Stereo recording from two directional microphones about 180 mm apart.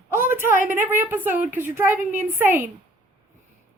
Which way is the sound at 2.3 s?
10° right (ahead or behind).